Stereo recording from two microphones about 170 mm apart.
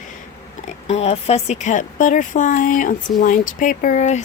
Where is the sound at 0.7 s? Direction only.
40° left (ahead or behind).